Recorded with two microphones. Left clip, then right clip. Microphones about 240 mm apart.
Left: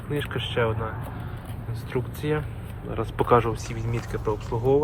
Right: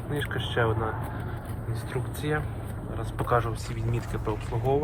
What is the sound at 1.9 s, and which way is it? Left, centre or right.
Speech, centre.